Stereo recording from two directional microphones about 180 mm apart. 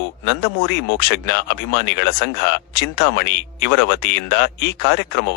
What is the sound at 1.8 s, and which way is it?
Speech, 70° left (ahead or behind).